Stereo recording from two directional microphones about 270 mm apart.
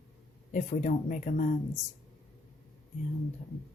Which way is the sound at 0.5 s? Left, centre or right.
Left.